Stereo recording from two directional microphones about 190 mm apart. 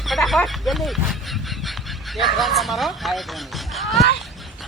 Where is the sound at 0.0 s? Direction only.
Centre (ahead or behind).